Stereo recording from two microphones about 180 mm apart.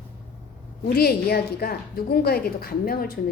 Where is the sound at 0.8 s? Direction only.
60° left (ahead or behind).